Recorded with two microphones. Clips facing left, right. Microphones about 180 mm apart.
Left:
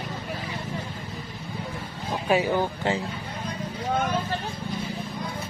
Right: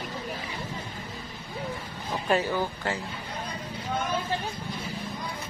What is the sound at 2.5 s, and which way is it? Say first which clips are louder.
Speech: left 4 dB; 20° left (ahead or behind).